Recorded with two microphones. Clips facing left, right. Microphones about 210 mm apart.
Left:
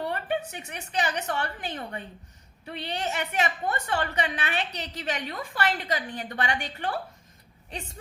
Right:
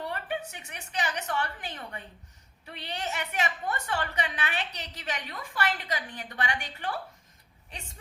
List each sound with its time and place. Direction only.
0.1 s a woman's voice: 25° left (ahead or behind)